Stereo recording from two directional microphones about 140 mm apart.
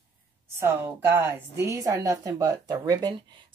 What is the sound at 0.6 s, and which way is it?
A woman's voice, 20° right (ahead or behind).